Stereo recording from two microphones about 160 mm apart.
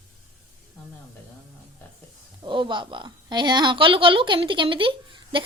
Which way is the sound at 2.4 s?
30° right (ahead or behind).